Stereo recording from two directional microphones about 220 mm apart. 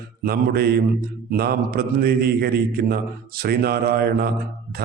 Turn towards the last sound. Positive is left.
turn(degrees=-45)  # may be behind; listen again after turning